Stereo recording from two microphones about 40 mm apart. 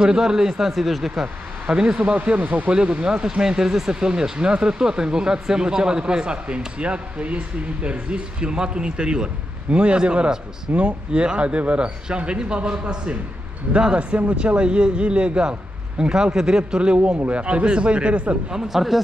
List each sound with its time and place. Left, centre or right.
0.0 s speech: centre
1.2 s speech: right
2.0 s speech: right
2.7 s speech: right
18.7 s speech: centre